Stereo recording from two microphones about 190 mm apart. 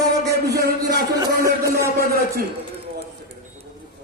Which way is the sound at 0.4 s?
55° right (ahead or behind).